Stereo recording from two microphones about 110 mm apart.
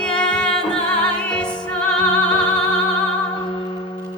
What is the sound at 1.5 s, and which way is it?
Music, 45° left (ahead or behind).